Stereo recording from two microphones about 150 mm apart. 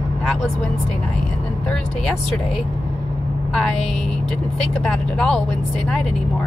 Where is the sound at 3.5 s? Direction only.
5° left (ahead or behind).